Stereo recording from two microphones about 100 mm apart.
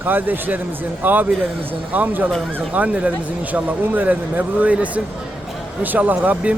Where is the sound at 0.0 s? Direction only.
20° right (ahead or behind).